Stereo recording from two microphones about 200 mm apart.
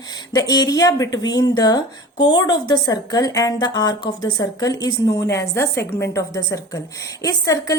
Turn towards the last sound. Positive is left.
turn(degrees=15)  # may be behind; listen again after turning